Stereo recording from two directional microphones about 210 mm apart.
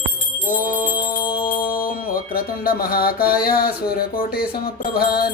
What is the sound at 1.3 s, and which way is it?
Music, 40° left (ahead or behind).